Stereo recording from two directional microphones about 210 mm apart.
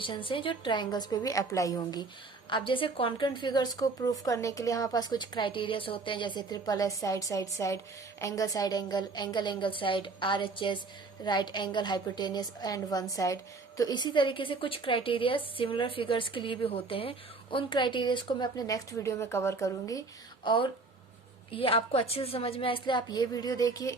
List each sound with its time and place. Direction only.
0.0 s a woman's voice: 25° left (ahead or behind)